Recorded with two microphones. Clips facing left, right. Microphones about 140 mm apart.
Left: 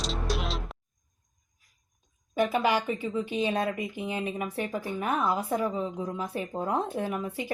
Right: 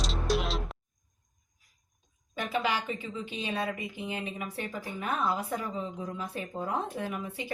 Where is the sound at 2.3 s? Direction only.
45° left (ahead or behind).